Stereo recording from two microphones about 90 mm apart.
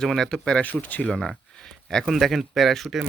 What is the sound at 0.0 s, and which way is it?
Speech, 5° left (ahead or behind).